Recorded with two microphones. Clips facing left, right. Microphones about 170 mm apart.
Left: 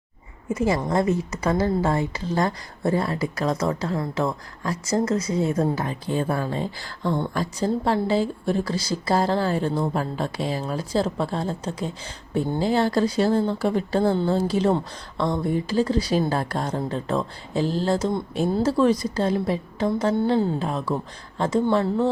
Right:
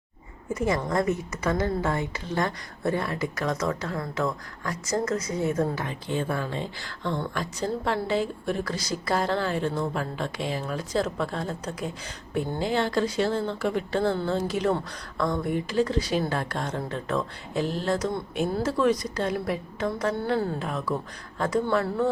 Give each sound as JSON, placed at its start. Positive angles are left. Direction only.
{"t": 0.5, "sound": "a woman's voice", "side_deg": 25}